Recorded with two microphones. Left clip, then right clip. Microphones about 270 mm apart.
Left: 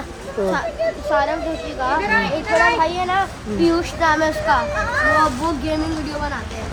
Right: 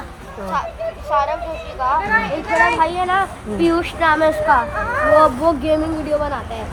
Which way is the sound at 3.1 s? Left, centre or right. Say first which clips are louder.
Right 2 dB; left.